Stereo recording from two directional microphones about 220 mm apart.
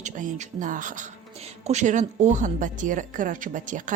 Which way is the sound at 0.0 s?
35° right (ahead or behind).